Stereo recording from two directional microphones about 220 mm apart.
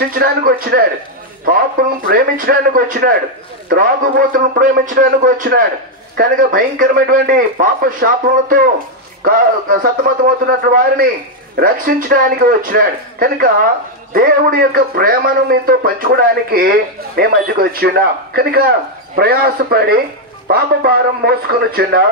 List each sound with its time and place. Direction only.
0.1 s a man's voice: 40° right (ahead or behind)